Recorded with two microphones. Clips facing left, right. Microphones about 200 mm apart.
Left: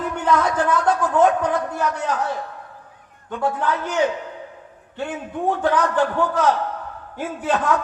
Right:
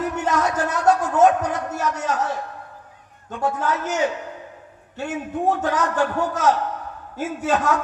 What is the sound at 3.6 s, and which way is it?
Speech, 40° right (ahead or behind).